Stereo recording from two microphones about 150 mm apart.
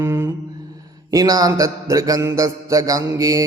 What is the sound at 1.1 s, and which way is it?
A man's voice, 25° right (ahead or behind).